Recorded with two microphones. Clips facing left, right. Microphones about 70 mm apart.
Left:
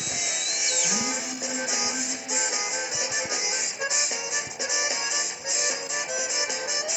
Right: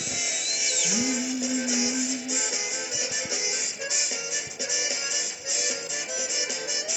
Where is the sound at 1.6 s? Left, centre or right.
Left.